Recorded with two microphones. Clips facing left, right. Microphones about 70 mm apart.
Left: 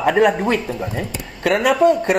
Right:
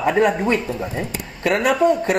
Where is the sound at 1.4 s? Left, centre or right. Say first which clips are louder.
Left 2 dB; left.